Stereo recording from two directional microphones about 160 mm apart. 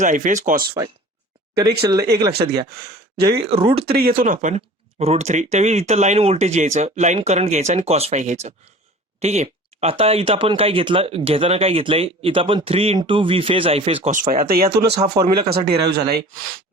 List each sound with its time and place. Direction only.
0.0 s speech: 50° right (ahead or behind)
1.8 s speech: 25° right (ahead or behind)
2.8 s speech: 80° right
3.4 s speech: 35° right (ahead or behind)
3.8 s speech: 70° right (ahead or behind); by 14.1 s 35° right (ahead or behind)
14.1 s speech: 60° right (ahead or behind)
14.9 s speech: 25° right (ahead or behind)
15.4 s speech: 80° right